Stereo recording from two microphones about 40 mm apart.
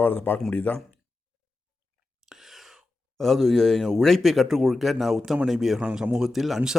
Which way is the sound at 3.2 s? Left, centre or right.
Centre.